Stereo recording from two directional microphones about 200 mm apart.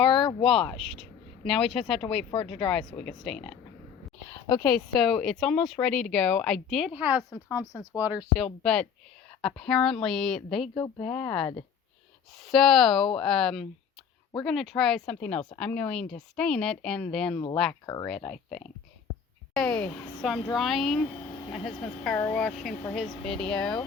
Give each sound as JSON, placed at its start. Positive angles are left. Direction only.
{"t": 0.1, "sound": "a sound", "side_deg": 25}
{"t": 1.5, "sound": "speech", "side_deg": 0}
{"t": 2.0, "sound": "speech", "side_deg": 30}
{"t": 2.6, "sound": "speech", "side_deg": 5}
{"t": 4.9, "sound": "speech", "side_deg": 0}
{"t": 7.3, "sound": "speech", "side_deg": 15}
{"t": 8.0, "sound": "speech", "side_deg": -5}
{"t": 8.6, "sound": "speech", "side_deg": 5}
{"t": 10.8, "sound": "speech", "side_deg": 20}
{"t": 11.0, "sound": "speech", "side_deg": 10}
{"t": 12.5, "sound": "speech", "side_deg": 0}
{"t": 17.8, "sound": "speech", "side_deg": 15}
{"t": 18.2, "sound": "speech", "side_deg": 5}